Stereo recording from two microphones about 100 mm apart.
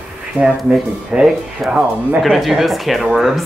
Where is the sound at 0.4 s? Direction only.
10° right (ahead or behind).